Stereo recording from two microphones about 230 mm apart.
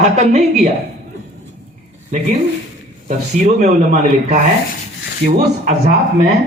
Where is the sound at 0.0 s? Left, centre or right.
Right.